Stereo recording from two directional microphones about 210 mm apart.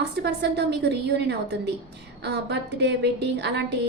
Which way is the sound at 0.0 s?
55° right (ahead or behind).